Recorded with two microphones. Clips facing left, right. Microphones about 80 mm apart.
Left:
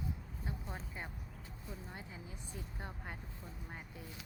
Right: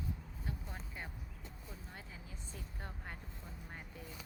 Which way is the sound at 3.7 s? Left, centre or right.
Centre.